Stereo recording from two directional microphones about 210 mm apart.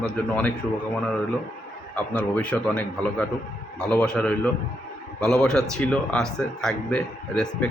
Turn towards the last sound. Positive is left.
turn(degrees=5)  # may be behind; listen again after turning